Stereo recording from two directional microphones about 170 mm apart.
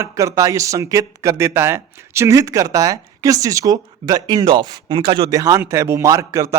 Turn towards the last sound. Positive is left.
turn(degrees=-20)  # may be behind; listen again after turning